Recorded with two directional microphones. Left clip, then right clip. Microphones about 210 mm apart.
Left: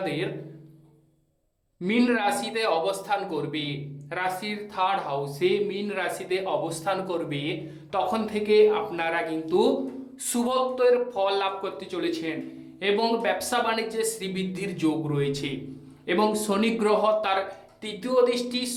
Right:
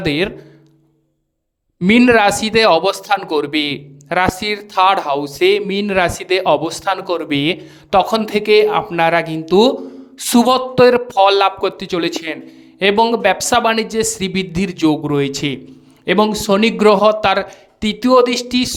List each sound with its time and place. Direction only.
0.0 s speech: 50° right (ahead or behind)
1.8 s speech: 45° right (ahead or behind)